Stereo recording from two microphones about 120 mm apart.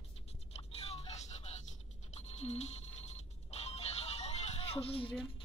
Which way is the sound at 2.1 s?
60° left (ahead or behind).